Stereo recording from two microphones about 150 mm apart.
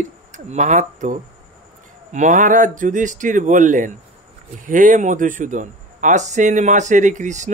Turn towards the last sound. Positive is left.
turn(degrees=-55)  # may be behind; listen again after turning